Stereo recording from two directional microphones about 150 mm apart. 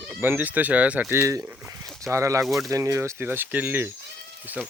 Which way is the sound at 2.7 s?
20° right (ahead or behind).